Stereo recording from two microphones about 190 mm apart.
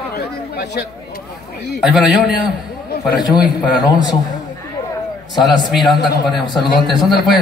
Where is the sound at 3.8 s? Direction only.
20° left (ahead or behind).